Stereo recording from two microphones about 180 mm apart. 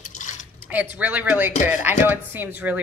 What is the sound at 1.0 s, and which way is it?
A woman's voice, 10° right (ahead or behind).